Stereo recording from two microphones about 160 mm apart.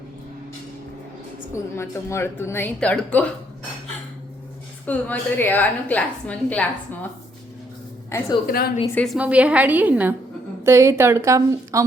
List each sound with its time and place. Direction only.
1.7 s a woman's voice: 15° left (ahead or behind)
4.9 s a woman's voice: 10° left (ahead or behind)
8.1 s a woman's voice: 15° left (ahead or behind)
8.4 s a woman's voice: 70° left (ahead or behind)
9.1 s a woman's voice: 10° right (ahead or behind)